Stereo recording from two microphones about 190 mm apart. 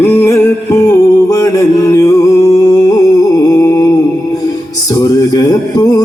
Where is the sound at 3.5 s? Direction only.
20° left (ahead or behind).